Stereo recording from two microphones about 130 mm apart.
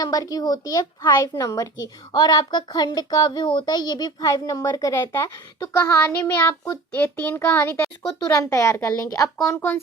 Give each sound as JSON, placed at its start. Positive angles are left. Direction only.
{"t": 0.0, "sound": "a child's voice", "side_deg": 30}